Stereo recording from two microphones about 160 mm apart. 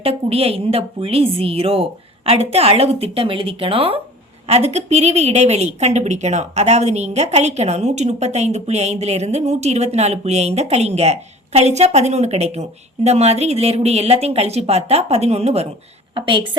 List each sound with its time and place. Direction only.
0.0 s a woman's voice: 40° right (ahead or behind)
16.1 s a woman's voice: 30° right (ahead or behind)